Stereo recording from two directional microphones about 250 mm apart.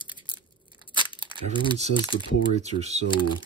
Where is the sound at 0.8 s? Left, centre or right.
Centre.